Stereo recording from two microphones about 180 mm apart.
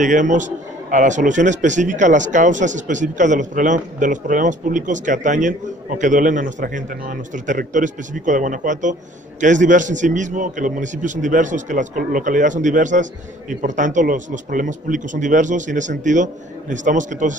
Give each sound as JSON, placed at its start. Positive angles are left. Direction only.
{"t": 0.0, "sound": "a man's voice", "side_deg": -45}